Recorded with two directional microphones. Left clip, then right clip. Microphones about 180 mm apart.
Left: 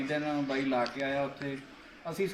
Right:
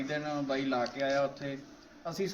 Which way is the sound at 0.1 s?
10° left (ahead or behind).